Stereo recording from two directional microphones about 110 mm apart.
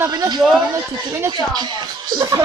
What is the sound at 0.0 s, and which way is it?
Music, 35° right (ahead or behind).